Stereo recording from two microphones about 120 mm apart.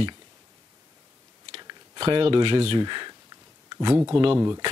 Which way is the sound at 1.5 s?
35° right (ahead or behind).